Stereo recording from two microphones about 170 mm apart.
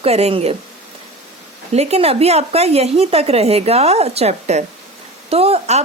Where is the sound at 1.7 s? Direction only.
40° right (ahead or behind).